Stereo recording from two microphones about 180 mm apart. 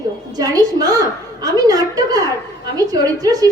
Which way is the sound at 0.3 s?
20° right (ahead or behind).